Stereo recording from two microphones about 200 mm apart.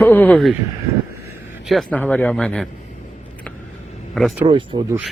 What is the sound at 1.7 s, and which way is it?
Speech, 5° left (ahead or behind).